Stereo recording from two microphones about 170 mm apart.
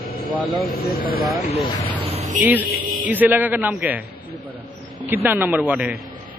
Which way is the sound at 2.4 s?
10° right (ahead or behind).